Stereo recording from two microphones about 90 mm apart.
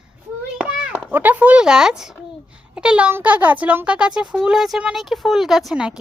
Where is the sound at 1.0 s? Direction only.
20° right (ahead or behind).